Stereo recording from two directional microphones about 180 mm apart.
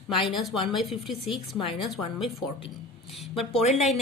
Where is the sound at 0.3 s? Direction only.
Centre (ahead or behind).